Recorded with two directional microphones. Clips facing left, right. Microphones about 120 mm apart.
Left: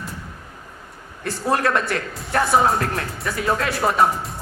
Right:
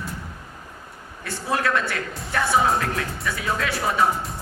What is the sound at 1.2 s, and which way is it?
A man's voice, 45° left (ahead or behind).